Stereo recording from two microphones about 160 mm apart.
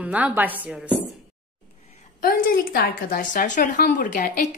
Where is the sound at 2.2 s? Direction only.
65° left (ahead or behind).